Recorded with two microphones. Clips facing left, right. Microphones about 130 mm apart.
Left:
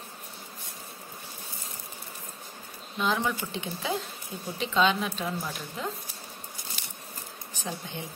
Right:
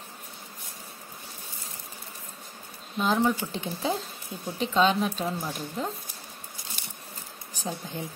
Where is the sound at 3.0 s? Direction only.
40° right (ahead or behind).